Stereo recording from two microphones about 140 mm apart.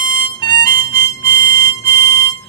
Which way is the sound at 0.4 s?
30° left (ahead or behind).